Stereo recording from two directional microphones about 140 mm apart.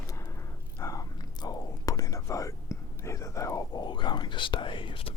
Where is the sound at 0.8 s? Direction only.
25° left (ahead or behind).